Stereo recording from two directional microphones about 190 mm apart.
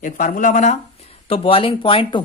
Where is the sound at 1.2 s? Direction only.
30° left (ahead or behind).